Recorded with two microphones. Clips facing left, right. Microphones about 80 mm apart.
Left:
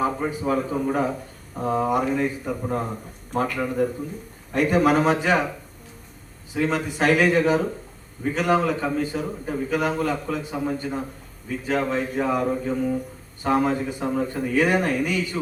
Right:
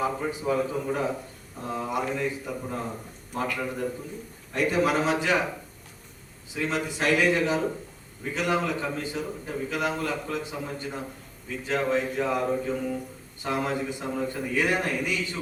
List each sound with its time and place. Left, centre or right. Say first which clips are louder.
0.0 s a man's voice: left 4 dB; left
6.7 s a man's voice: left 3 dB; left